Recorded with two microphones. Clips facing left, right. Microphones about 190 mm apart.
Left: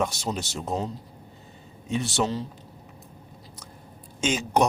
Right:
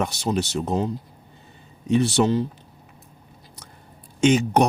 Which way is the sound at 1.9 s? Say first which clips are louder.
Right 7 dB; 60° right (ahead or behind).